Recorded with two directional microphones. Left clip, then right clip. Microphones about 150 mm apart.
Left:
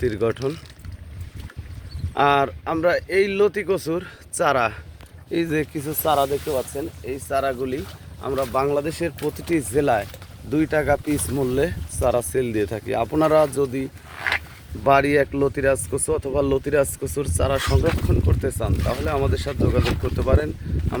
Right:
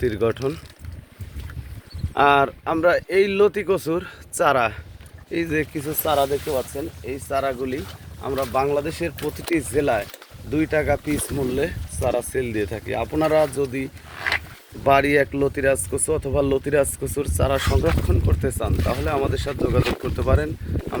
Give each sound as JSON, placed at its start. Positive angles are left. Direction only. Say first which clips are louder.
{"t": 0.0, "sound": "speech", "louder": "right 1 dB", "side_deg": 5}
{"t": 2.1, "sound": "speech", "louder": "right 2 dB", "side_deg": -5}
{"t": 5.3, "sound": "speech", "louder": "even", "side_deg": 35}
{"t": 11.3, "sound": "speech", "louder": "left 3 dB", "side_deg": 45}
{"t": 14.8, "sound": "speech", "louder": "even", "side_deg": 10}